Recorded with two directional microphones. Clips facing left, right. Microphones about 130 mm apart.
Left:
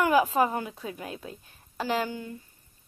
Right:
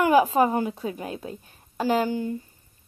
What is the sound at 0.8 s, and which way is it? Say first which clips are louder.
Speech: right 6 dB; 40° right (ahead or behind).